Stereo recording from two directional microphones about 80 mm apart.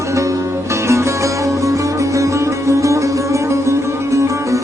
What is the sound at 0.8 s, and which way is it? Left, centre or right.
Music, right.